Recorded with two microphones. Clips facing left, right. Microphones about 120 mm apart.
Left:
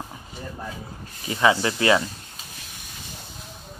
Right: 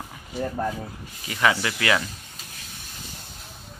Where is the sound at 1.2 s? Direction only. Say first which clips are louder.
Left 3 dB; 25° left (ahead or behind).